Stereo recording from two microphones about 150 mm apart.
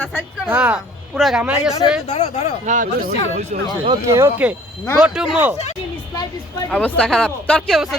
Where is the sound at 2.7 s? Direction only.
60° right (ahead or behind).